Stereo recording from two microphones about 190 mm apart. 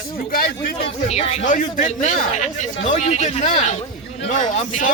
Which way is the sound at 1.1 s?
35° left (ahead or behind).